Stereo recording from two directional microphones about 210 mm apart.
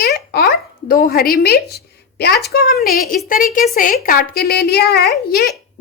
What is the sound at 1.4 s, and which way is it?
A woman's voice, 50° left (ahead or behind).